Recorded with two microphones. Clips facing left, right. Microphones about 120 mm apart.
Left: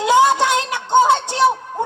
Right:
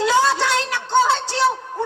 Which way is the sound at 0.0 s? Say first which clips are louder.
Left 4 dB; 20° left (ahead or behind).